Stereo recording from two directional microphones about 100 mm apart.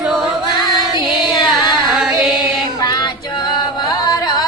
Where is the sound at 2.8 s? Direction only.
40° left (ahead or behind).